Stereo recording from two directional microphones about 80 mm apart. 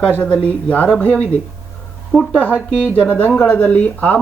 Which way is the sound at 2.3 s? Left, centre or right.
Centre.